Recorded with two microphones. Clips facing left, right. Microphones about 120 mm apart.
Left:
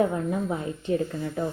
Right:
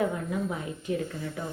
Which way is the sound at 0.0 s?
35° left (ahead or behind).